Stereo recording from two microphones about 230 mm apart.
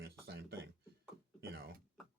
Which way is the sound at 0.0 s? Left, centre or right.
Right.